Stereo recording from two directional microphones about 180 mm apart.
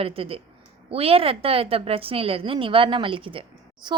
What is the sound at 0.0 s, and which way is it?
A woman's voice, 30° right (ahead or behind).